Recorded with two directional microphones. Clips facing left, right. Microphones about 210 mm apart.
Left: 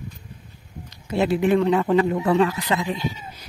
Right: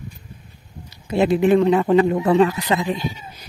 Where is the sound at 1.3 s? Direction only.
25° right (ahead or behind).